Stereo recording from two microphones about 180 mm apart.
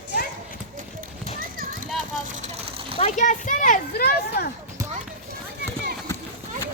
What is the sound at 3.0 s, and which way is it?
Speech, 45° left (ahead or behind).